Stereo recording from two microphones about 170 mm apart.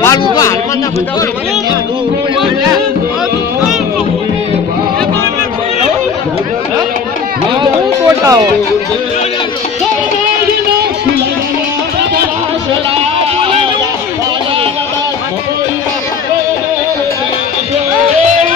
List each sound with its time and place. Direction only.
0.0 s a sound: 20° left (ahead or behind)
8.2 s speech: 20° right (ahead or behind)
13.4 s music: 30° right (ahead or behind)